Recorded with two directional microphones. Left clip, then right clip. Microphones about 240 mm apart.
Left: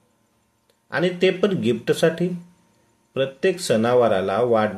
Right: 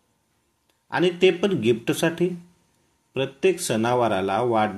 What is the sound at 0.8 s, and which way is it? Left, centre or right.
Speech, centre.